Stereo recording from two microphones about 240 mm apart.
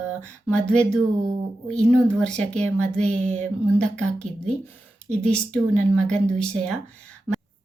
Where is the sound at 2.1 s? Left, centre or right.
Centre.